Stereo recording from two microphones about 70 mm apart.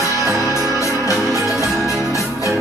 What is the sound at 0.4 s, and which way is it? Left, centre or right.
Music, left.